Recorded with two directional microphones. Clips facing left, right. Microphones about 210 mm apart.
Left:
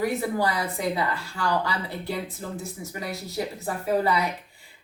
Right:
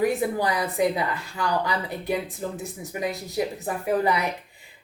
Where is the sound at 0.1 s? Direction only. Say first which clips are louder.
Right 1 dB; 15° right (ahead or behind).